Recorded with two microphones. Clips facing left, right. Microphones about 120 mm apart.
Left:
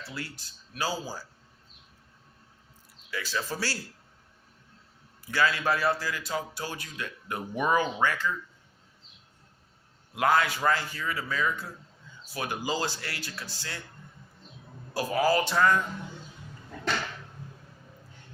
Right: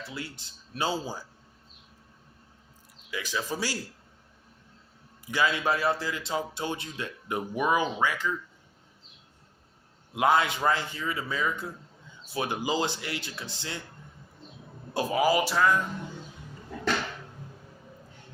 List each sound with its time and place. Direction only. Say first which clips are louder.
0.1 s a man's voice: even; 20° right (ahead or behind)
3.1 s speech: right 1 dB; 15° right (ahead or behind)
5.2 s a man's voice: even; 15° right (ahead or behind)
7.5 s speech: left 1 dB; 5° right (ahead or behind)
10.2 s a man's voice: right 1 dB; 20° right (ahead or behind)
14.9 s speech: right 1 dB; 15° right (ahead or behind)